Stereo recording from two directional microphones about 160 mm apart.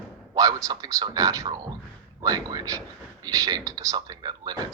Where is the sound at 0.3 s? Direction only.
20° right (ahead or behind).